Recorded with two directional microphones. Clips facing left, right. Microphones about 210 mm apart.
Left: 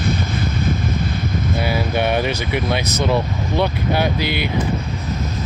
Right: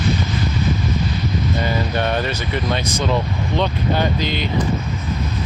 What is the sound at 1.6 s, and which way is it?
Speech, 10° left (ahead or behind).